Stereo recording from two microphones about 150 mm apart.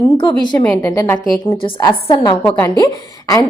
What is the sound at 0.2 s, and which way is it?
A woman's voice, 30° left (ahead or behind).